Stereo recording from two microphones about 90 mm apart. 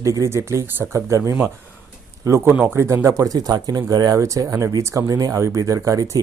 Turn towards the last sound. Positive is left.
turn(degrees=-35)  # may be behind; listen again after turning